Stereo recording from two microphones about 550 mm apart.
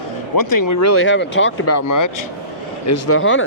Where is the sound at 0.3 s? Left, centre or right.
Left.